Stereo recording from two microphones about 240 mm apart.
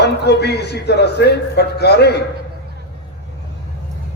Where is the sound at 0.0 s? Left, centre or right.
Left.